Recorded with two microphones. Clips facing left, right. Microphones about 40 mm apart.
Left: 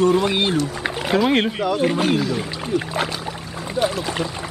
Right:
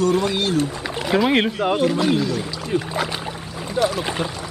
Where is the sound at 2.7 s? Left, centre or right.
Right.